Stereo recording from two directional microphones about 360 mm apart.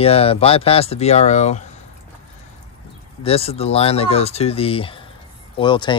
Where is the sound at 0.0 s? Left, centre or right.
Centre.